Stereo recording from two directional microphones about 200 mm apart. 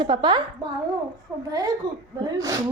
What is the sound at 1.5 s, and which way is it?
A woman's voice, 20° right (ahead or behind).